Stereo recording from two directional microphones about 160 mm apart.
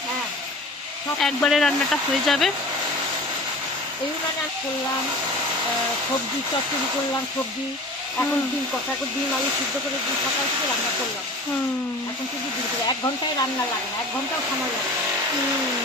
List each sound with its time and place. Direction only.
1.2 s speech: centre (ahead or behind)